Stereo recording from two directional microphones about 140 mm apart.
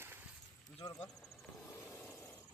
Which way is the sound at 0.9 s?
20° left (ahead or behind).